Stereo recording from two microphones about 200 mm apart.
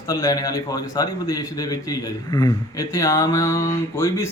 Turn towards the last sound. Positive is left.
turn(degrees=15)  # may be behind; listen again after turning